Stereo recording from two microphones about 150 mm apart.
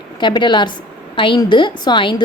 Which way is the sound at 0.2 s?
30° left (ahead or behind).